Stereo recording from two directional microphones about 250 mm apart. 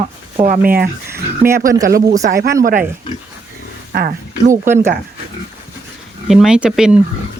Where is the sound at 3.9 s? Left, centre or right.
Right.